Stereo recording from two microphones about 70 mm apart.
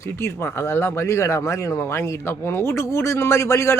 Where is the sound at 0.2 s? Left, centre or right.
Left.